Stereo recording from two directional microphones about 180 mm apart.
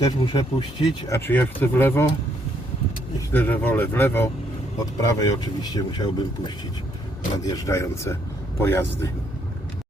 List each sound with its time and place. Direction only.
0.0 s speech: 25° left (ahead or behind)
3.3 s speech: 10° left (ahead or behind)
7.4 s speech: 20° left (ahead or behind)